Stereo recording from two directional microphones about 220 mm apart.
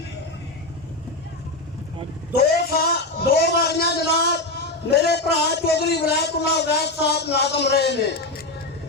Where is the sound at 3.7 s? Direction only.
50° left (ahead or behind).